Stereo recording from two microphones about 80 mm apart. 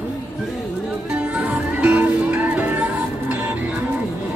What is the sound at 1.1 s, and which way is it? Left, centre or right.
Music, centre.